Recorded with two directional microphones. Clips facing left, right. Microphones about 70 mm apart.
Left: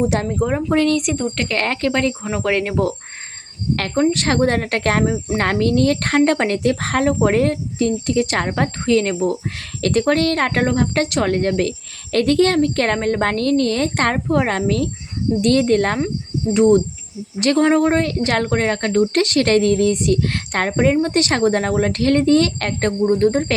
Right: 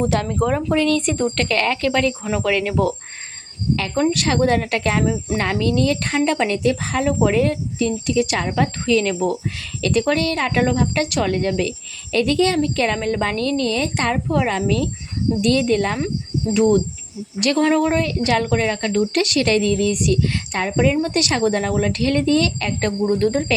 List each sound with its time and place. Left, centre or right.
0.3 s speech: centre
0.7 s speech: left
4.1 s speech: left
5.0 s speech: left
5.4 s speech: left
20.2 s speech: left
20.7 s speech: left
22.9 s speech: left